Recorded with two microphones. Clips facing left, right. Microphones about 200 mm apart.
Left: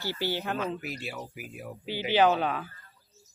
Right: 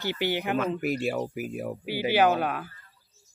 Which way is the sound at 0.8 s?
50° right (ahead or behind).